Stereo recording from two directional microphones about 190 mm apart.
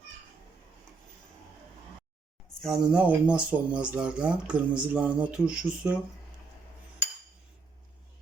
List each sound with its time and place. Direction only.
2.6 s speech: centre (ahead or behind)